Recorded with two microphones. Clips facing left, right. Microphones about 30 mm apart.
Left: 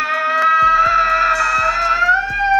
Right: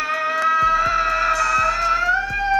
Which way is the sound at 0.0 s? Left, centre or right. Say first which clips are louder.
Left 5 dB; centre.